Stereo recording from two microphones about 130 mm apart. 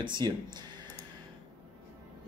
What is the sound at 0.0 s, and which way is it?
Speech, 35° right (ahead or behind).